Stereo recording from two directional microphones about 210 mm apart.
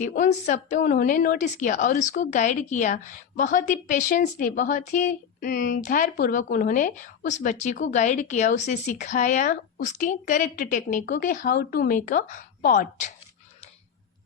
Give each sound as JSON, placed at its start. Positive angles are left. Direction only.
{"t": 0.0, "sound": "speech", "side_deg": 40}